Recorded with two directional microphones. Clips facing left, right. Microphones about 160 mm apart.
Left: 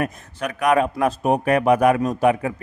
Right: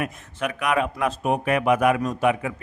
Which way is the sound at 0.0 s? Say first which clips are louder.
Left 2 dB; 40° left (ahead or behind).